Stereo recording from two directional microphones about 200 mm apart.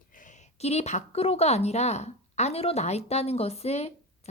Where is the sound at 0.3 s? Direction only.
30° left (ahead or behind).